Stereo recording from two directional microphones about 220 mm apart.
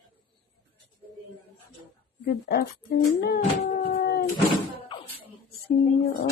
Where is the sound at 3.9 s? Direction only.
40° left (ahead or behind).